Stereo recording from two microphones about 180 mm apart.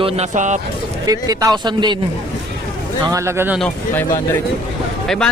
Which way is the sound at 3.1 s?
15° right (ahead or behind).